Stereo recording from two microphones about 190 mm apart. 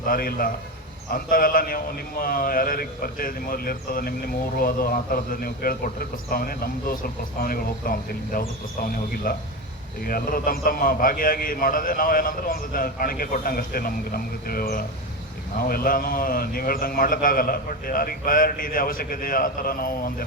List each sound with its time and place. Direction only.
0.0 s speech: 50° left (ahead or behind)